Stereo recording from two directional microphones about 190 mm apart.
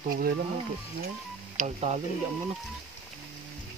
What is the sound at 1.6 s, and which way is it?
Speech, 35° right (ahead or behind).